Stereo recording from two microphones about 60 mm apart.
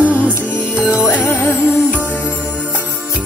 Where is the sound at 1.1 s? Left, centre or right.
Left.